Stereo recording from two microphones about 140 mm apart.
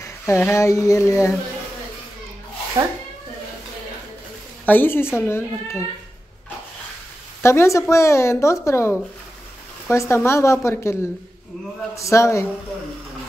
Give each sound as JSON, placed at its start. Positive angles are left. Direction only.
{"t": 0.3, "sound": "a woman's voice", "side_deg": 20}
{"t": 2.8, "sound": "speech", "side_deg": -35}
{"t": 4.6, "sound": "speech", "side_deg": 15}
{"t": 7.4, "sound": "a woman's voice", "side_deg": 20}